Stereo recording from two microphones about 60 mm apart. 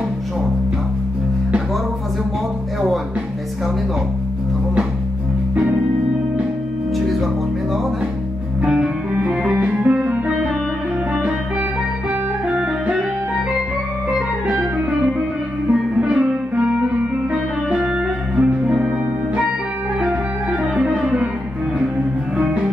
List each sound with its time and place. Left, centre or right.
8.6 s music: centre
12.4 s music: centre
15.7 s music: centre
20.7 s music: centre